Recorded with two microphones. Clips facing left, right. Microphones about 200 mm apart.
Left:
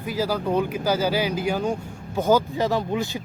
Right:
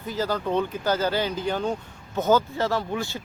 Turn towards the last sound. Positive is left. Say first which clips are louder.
# left 3 dB
turn(degrees=20)  # may be behind; listen again after turning